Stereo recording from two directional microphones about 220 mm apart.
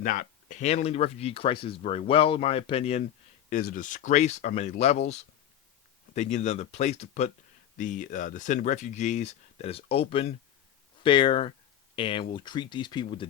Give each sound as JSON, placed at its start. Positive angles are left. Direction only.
{"t": 0.0, "sound": "speech", "side_deg": 35}
{"t": 3.5, "sound": "speech", "side_deg": 40}